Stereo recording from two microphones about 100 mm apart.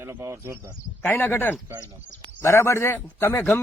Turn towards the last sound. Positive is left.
turn(degrees=25)  # may be behind; listen again after turning